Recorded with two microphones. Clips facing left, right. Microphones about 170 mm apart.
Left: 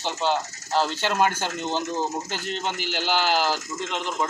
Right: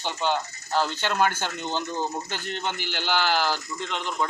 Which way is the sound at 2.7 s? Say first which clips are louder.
Left 2 dB; 40° left (ahead or behind).